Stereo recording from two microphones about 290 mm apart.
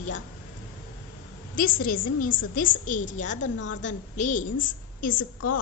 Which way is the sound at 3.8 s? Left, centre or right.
Left.